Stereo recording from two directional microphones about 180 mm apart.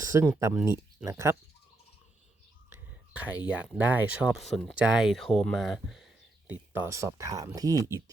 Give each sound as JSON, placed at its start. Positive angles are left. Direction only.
{"t": 0.0, "sound": "speech", "side_deg": -15}
{"t": 2.6, "sound": "whispering", "side_deg": -10}
{"t": 3.8, "sound": "speech", "side_deg": -10}
{"t": 6.5, "sound": "speech", "side_deg": -15}